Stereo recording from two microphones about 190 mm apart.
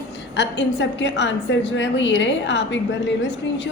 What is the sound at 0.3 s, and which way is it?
A woman's voice, 70° left (ahead or behind).